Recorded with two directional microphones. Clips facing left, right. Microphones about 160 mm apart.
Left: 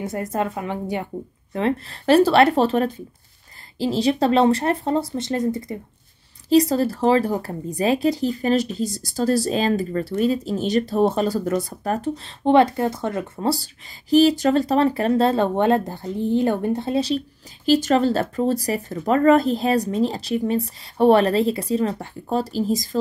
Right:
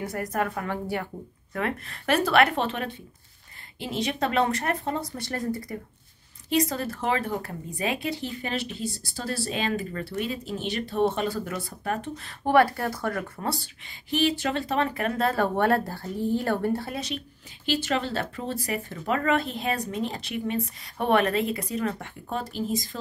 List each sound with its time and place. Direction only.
0.0 s speech: 25° left (ahead or behind)
6.5 s speech: 35° left (ahead or behind)
14.1 s speech: 40° left (ahead or behind)
17.6 s speech: 40° left (ahead or behind)